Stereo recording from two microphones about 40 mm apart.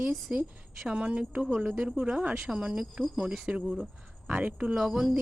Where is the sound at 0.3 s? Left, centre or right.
Right.